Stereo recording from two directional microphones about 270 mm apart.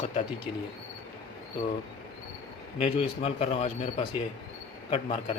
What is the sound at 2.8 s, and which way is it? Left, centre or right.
A man's voice, left.